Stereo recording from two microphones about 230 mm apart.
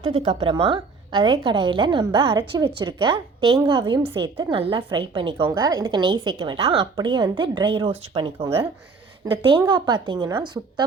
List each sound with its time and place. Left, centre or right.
0.0 s a woman's voice: right